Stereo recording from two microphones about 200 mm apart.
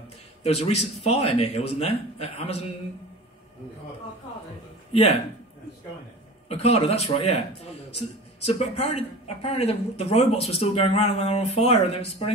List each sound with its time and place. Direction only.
0.4 s a man's voice: 30° left (ahead or behind)
4.9 s speech: 30° left (ahead or behind)
6.5 s speech: 30° left (ahead or behind)
8.5 s speech: 30° left (ahead or behind)